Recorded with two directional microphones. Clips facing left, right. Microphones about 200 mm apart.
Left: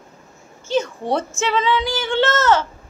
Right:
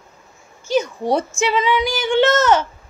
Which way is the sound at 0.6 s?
10° right (ahead or behind).